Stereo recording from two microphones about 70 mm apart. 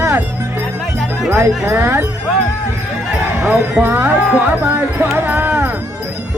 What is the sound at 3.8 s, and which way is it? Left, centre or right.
Music, right.